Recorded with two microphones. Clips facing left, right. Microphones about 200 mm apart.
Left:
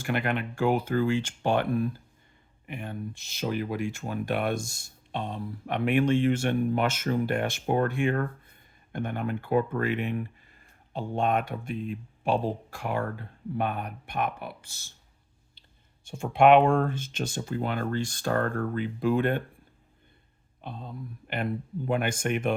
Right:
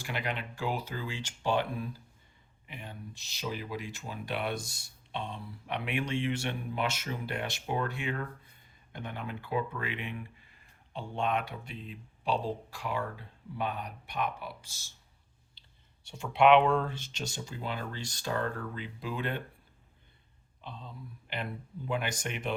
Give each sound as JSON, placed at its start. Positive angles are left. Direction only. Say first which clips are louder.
{"t": 0.0, "sound": "speech", "louder": "left 8 dB", "side_deg": 55}
{"t": 16.0, "sound": "speech", "louder": "left 4 dB", "side_deg": 45}
{"t": 20.6, "sound": "speech", "louder": "left 6 dB", "side_deg": 50}